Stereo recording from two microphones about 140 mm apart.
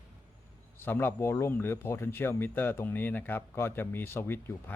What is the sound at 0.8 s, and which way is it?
Speech, 15° left (ahead or behind).